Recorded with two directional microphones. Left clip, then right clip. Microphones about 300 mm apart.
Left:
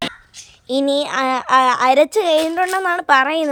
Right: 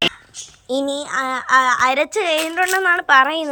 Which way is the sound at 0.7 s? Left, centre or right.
Centre.